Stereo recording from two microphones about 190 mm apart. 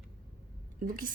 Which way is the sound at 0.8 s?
45° right (ahead or behind).